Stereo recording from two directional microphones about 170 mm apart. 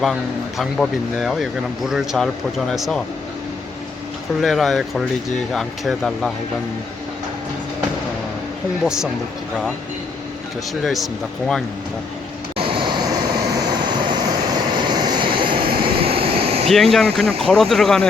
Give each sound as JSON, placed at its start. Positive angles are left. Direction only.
{"t": 0.0, "sound": "speech", "side_deg": 0}
{"t": 4.4, "sound": "speech", "side_deg": 0}
{"t": 8.8, "sound": "speech", "side_deg": -5}
{"t": 10.8, "sound": "speech", "side_deg": 0}
{"t": 12.5, "sound": "vehicle", "side_deg": -30}
{"t": 14.1, "sound": "vehicle", "side_deg": -25}
{"t": 15.5, "sound": "vehicle", "side_deg": -65}
{"t": 15.8, "sound": "air conditioning", "side_deg": -30}
{"t": 16.6, "sound": "speech", "side_deg": 0}